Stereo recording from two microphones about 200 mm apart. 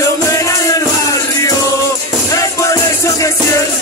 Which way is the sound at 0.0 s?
15° left (ahead or behind).